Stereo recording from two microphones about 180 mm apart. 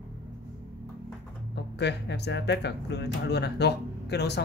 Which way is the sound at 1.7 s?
70° left (ahead or behind).